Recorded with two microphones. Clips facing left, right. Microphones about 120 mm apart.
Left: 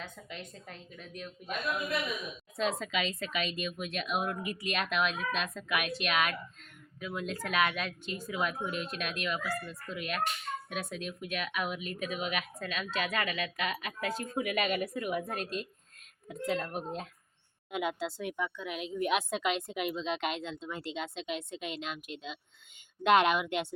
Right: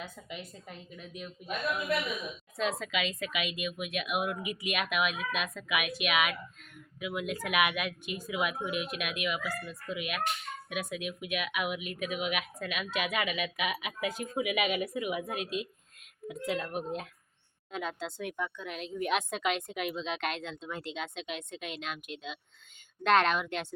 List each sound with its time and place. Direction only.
0.0 s a woman's voice: 10° right (ahead or behind)
2.6 s a woman's voice: centre (ahead or behind)
17.7 s speech: 15° left (ahead or behind)
18.0 s a woman's voice: 5° left (ahead or behind)